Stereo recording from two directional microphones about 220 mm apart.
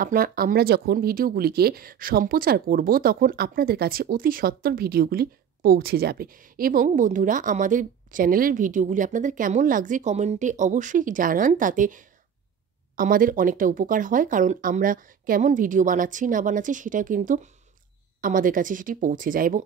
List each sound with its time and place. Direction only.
0.0 s speech: 40° right (ahead or behind)